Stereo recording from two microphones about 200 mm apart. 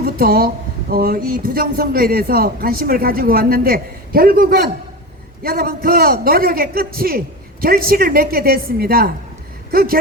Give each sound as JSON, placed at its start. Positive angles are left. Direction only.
{"t": 0.0, "sound": "speech", "side_deg": -50}